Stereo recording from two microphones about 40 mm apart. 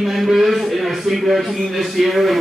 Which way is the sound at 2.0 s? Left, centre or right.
Centre.